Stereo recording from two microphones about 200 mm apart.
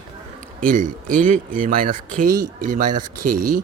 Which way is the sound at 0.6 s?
45° right (ahead or behind).